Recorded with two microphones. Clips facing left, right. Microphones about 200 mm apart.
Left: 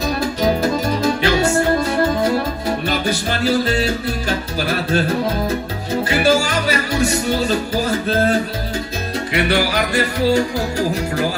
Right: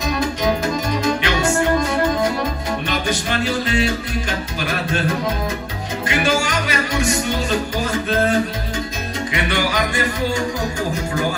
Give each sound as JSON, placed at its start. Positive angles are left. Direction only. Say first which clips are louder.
{"t": 0.0, "sound": "music", "louder": "left 2 dB", "side_deg": 35}